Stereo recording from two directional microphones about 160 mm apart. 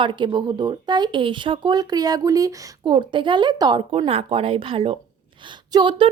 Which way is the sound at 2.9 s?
30° right (ahead or behind).